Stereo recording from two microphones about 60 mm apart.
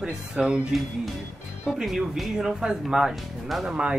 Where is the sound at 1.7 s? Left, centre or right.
Centre.